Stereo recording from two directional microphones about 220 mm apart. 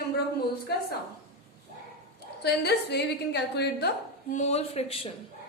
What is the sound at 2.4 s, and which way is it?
A woman's voice, 50° left (ahead or behind).